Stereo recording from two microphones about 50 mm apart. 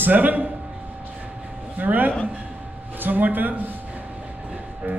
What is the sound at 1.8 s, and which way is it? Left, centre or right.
Speech, right.